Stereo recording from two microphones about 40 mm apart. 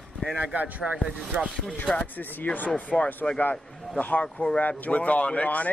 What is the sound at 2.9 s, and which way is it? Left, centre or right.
Speech, centre.